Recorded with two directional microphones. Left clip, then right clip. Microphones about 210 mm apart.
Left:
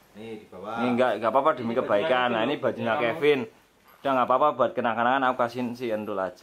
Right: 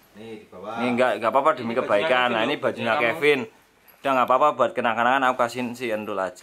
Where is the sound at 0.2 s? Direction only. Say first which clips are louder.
Right 1 dB; 10° left (ahead or behind).